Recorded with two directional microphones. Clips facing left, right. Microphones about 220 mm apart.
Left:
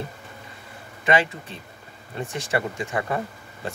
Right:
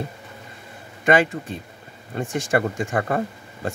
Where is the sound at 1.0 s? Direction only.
45° right (ahead or behind).